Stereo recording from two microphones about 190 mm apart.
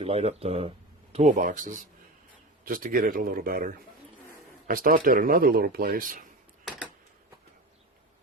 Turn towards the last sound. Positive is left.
turn(degrees=-45)  # may be behind; listen again after turning